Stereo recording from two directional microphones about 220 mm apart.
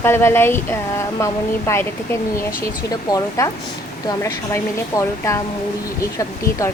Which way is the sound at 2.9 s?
15° left (ahead or behind).